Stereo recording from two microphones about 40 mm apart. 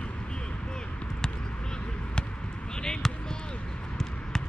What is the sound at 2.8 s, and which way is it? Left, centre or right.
Speech, centre.